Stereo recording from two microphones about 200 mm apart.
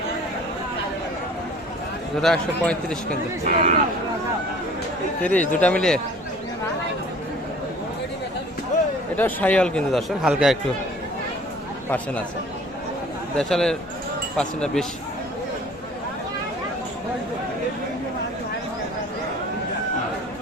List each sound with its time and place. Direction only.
2.2 s speech: centre (ahead or behind)
3.1 s speech: 45° right (ahead or behind)
5.2 s speech: 5° left (ahead or behind)
9.1 s speech: 10° left (ahead or behind)
13.3 s speech: 5° left (ahead or behind)